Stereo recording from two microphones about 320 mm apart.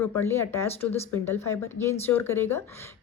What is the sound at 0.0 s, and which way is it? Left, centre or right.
A woman's voice, centre.